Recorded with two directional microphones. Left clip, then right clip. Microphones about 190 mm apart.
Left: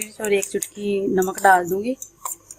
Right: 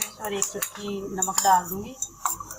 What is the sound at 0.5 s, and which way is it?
Cutlery, 65° left (ahead or behind).